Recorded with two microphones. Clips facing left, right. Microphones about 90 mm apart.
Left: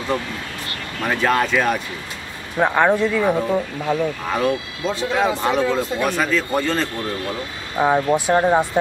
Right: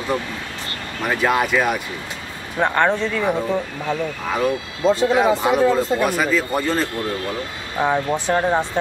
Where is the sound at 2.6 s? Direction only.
5° left (ahead or behind).